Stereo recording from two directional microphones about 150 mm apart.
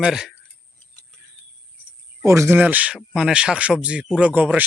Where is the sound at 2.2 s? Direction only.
20° right (ahead or behind).